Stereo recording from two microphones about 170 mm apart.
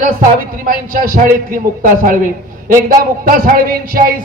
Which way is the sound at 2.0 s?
55° right (ahead or behind).